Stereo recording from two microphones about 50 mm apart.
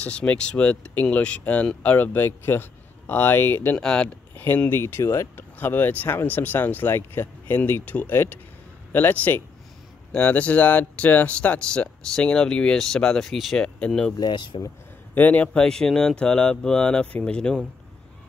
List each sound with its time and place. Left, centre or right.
0.0 s speech: left
2.1 s speech: left
3.7 s speech: centre
4.6 s speech: left
5.3 s speech: left
8.1 s speech: left
10.1 s speech: left; by 13.6 s centre
13.6 s speech: centre
15.1 s speech: left
15.5 s speech: centre